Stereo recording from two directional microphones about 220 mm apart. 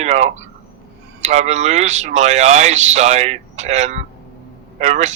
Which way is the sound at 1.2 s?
30° right (ahead or behind).